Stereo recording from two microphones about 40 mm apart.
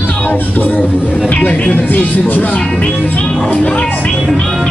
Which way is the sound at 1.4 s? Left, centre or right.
Left.